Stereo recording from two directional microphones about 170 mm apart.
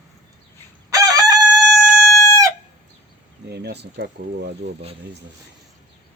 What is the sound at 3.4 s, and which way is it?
Speech, 70° right (ahead or behind).